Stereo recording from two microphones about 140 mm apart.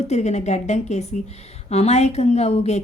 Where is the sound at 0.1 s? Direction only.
55° left (ahead or behind).